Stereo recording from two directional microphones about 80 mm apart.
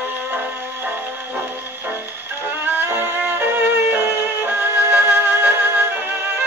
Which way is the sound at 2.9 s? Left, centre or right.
Right.